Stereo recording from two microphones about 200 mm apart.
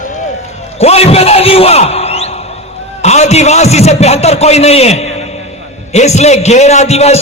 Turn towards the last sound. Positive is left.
turn(degrees=35)  # may be behind; listen again after turning